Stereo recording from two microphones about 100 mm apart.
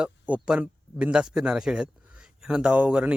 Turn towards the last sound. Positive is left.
turn(degrees=-10)  # may be behind; listen again after turning